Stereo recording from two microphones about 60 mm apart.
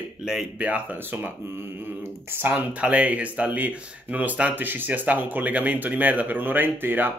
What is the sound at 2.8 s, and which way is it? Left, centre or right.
Speech, right.